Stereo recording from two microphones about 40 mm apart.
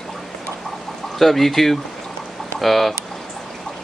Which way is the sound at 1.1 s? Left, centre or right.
Centre.